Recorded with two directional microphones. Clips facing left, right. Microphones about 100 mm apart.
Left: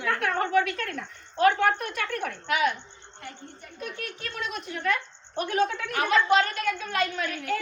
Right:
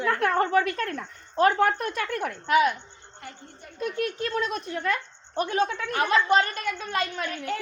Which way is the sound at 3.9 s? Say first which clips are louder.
Right 10 dB; 35° right (ahead or behind).